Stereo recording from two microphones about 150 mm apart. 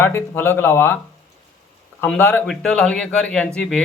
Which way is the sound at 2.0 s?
10° left (ahead or behind).